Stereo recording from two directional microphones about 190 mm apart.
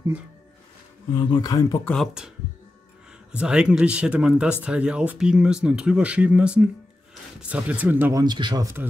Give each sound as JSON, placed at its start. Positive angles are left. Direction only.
{"t": 1.1, "sound": "speech", "side_deg": 25}
{"t": 1.9, "sound": "speech", "side_deg": 0}